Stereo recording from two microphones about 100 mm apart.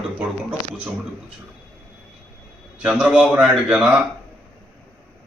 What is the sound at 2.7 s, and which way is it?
A man's voice, 10° right (ahead or behind).